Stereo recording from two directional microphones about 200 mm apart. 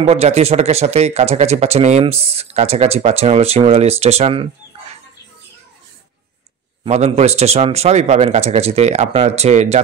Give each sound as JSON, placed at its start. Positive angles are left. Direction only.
{"t": 0.0, "sound": "speech", "side_deg": -30}
{"t": 6.8, "sound": "speech", "side_deg": -30}